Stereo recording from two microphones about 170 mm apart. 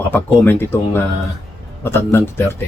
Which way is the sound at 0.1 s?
10° left (ahead or behind).